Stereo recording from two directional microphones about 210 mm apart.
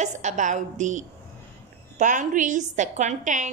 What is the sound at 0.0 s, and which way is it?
A woman's voice, 35° right (ahead or behind).